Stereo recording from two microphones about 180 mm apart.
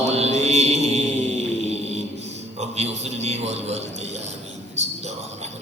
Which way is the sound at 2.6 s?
35° right (ahead or behind).